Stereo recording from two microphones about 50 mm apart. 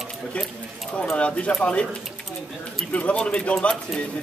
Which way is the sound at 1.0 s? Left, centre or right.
Left.